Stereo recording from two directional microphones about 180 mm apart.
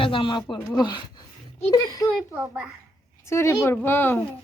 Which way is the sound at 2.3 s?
10° right (ahead or behind).